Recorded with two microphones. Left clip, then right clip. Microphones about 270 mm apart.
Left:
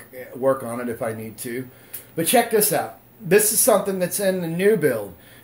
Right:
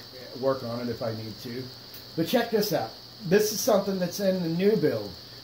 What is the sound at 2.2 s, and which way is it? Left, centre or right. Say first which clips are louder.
Speech: left 7 dB; left.